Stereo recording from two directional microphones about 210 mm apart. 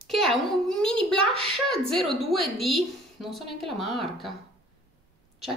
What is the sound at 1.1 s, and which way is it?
Speech, 25° right (ahead or behind).